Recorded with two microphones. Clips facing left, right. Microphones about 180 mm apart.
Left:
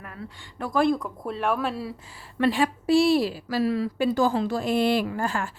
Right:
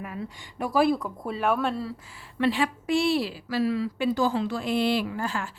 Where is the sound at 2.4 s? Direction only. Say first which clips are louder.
Left 2 dB; 45° left (ahead or behind).